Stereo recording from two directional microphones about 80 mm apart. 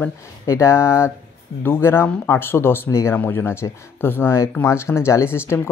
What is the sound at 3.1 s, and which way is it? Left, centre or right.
Speech, left.